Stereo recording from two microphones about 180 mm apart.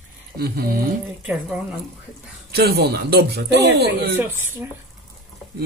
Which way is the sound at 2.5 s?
60° right (ahead or behind).